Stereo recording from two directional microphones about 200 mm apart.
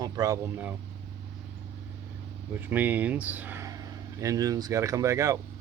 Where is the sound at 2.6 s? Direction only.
10° right (ahead or behind).